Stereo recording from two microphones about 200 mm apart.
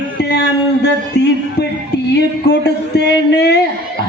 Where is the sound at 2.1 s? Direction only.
55° left (ahead or behind).